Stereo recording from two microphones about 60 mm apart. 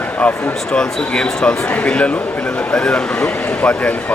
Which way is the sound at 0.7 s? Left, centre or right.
Centre.